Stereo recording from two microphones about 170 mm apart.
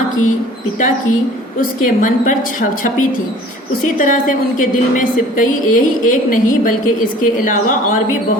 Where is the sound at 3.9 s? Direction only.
50° left (ahead or behind).